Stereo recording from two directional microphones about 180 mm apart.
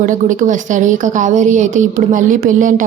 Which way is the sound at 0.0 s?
45° right (ahead or behind).